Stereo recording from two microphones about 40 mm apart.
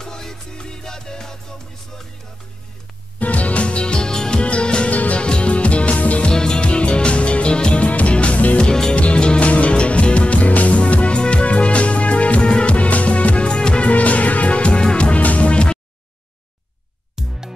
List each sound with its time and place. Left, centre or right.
0.0 s music: centre
3.2 s music: left
4.9 s music: left
5.2 s music: left
6.2 s music: left
13.8 s music: left
17.2 s music: centre